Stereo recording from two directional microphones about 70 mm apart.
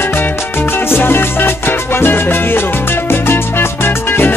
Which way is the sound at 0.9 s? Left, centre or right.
Left.